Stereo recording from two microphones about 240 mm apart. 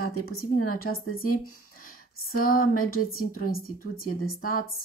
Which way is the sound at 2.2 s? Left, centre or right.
Left.